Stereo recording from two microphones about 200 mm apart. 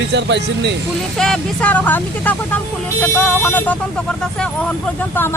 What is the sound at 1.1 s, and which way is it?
Speech, centre (ahead or behind).